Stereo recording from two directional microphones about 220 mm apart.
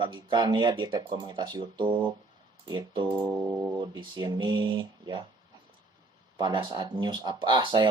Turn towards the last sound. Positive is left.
turn(degrees=-20)  # may be behind; listen again after turning